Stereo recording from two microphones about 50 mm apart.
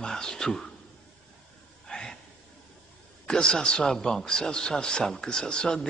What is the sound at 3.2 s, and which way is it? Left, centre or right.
Speech, centre.